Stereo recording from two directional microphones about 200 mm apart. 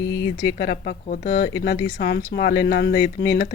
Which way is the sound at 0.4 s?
55° left (ahead or behind).